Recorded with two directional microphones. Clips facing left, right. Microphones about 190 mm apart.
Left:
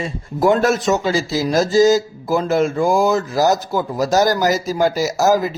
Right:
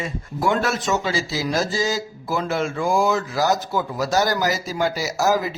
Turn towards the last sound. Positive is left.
turn(degrees=40)  # may be behind; listen again after turning